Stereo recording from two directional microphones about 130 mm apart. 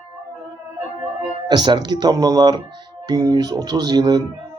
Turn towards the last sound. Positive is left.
turn(degrees=-35)  # may be behind; listen again after turning